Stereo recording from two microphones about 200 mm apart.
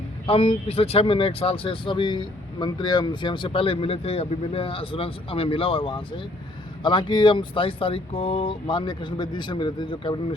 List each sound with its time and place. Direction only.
0.3 s speech: 30° left (ahead or behind)